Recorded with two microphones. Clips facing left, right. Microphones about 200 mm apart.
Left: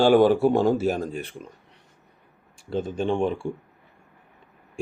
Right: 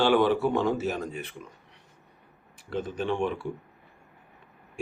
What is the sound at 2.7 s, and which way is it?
Speech, 25° left (ahead or behind).